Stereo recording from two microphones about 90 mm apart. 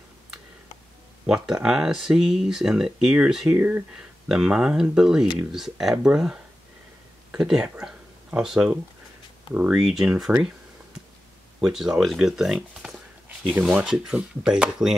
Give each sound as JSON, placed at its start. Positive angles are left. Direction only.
{"t": 1.2, "sound": "speech", "side_deg": -5}
{"t": 3.5, "sound": "speech", "side_deg": -20}
{"t": 4.3, "sound": "speech", "side_deg": -5}
{"t": 11.6, "sound": "speech", "side_deg": -5}
{"t": 12.8, "sound": "a sound", "side_deg": 0}
{"t": 13.7, "sound": "speech", "side_deg": -10}